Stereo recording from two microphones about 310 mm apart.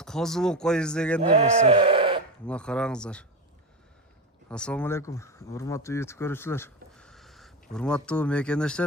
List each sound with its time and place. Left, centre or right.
0.0 s speech: centre
1.2 s speech: centre
2.5 s speech: centre
4.4 s speech: centre